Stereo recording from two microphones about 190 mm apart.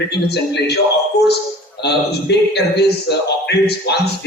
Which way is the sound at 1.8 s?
60° left (ahead or behind).